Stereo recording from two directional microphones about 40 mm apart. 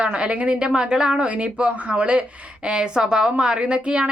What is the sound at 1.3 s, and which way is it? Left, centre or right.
A woman's voice, right.